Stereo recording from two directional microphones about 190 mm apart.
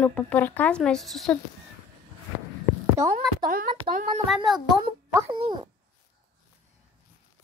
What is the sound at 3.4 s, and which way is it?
Speech, 50° right (ahead or behind).